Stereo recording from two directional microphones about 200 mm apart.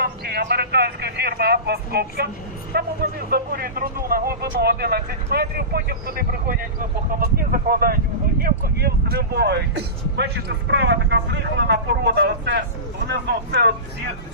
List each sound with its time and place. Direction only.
0.0 s speech: 55° right (ahead or behind)